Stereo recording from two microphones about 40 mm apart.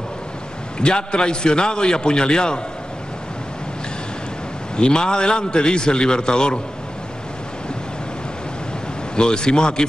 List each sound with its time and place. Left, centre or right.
0.7 s a man's voice: left
4.7 s a man's voice: left
9.1 s a man's voice: left